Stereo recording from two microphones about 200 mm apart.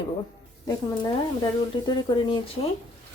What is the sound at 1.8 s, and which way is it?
Speech, 25° left (ahead or behind).